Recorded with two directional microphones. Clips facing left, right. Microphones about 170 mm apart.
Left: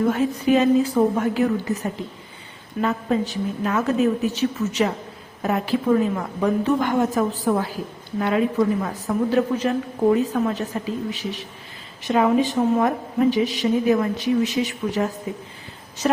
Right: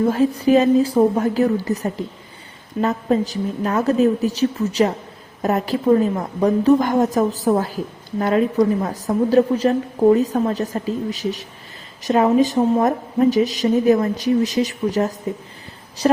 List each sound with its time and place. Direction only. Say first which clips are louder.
0.4 s a woman's voice: right 2 dB; 35° right (ahead or behind)